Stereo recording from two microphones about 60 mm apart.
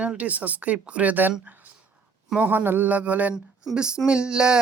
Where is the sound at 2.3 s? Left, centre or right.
Right.